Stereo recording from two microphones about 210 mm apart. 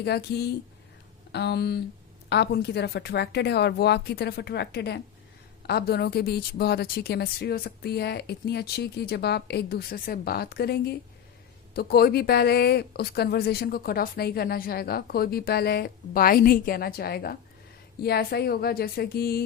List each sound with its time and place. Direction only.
0.0 s a woman's voice: 50° left (ahead or behind)